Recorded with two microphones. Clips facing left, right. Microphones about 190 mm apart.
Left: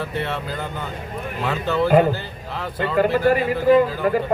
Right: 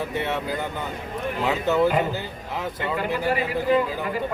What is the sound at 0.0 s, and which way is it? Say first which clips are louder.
Speech: even; 15° right (ahead or behind).